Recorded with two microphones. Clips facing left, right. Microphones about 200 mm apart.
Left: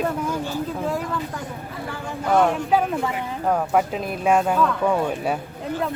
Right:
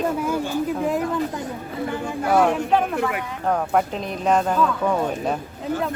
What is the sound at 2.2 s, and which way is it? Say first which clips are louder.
Speech: even; 5° right (ahead or behind).